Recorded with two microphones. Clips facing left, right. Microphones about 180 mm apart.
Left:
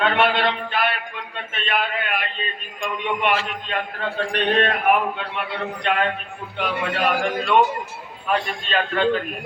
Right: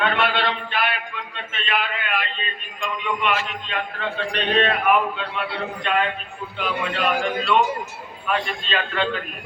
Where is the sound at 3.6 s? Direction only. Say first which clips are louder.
Left 1 dB; 45° left (ahead or behind).